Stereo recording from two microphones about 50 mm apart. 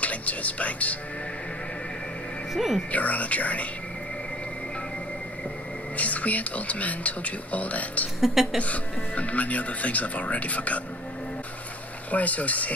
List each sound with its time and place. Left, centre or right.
0.0 s speech: left
2.5 s a woman's voice: centre
2.9 s speech: left
5.9 s speech: left
8.2 s speech: centre
8.5 s speech: left
12.1 s speech: left